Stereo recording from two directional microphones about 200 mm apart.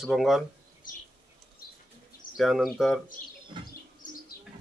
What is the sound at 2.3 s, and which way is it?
Speech, centre (ahead or behind).